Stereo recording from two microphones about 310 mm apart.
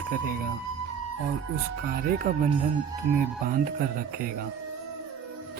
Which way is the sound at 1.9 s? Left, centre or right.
Right.